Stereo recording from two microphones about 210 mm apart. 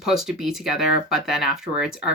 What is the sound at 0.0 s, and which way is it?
Speech, centre (ahead or behind).